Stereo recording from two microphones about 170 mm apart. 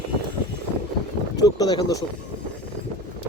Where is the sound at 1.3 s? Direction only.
20° left (ahead or behind).